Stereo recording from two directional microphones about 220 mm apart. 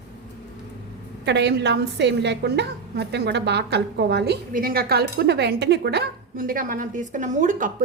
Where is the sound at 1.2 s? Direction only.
50° right (ahead or behind).